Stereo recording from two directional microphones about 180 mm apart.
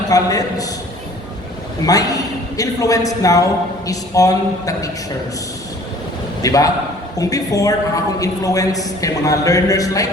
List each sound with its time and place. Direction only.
0.1 s a man's voice: 20° left (ahead or behind)
1.9 s a man's voice: 20° left (ahead or behind)
6.4 s a man's voice: 20° left (ahead or behind)